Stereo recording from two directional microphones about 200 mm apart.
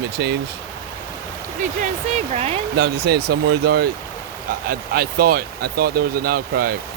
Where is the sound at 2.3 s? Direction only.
30° right (ahead or behind).